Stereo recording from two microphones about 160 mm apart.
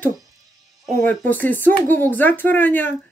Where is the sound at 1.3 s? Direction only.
10° left (ahead or behind).